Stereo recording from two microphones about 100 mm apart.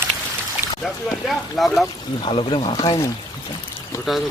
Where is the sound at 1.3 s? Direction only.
Centre (ahead or behind).